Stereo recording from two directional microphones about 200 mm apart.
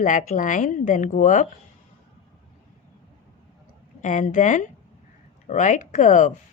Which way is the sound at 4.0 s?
40° left (ahead or behind).